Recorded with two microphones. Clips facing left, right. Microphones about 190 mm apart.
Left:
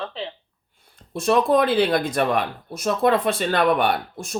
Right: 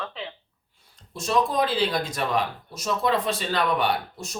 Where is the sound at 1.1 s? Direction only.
60° left (ahead or behind).